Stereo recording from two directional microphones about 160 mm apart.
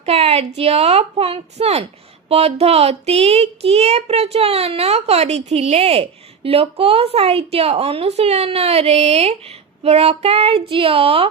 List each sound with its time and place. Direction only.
0.0 s speech: 40° right (ahead or behind)